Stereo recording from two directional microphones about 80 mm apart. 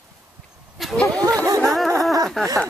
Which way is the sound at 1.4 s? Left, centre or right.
Right.